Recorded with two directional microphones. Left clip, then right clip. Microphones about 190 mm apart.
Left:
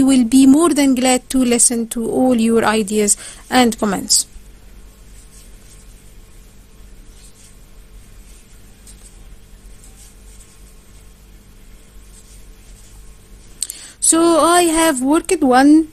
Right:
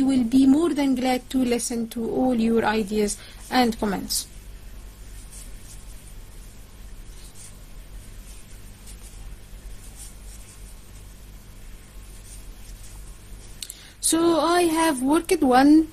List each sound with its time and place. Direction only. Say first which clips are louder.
0.1 s speech: left 6 dB; 50° left (ahead or behind)
13.6 s speech: left 9 dB; 45° left (ahead or behind)